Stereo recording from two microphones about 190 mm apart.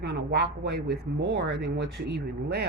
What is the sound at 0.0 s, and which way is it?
Speech, 60° right (ahead or behind).